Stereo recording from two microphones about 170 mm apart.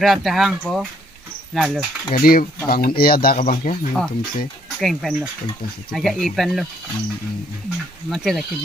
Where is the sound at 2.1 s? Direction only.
60° left (ahead or behind).